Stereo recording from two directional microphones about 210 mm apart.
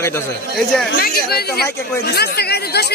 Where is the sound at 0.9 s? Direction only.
50° left (ahead or behind).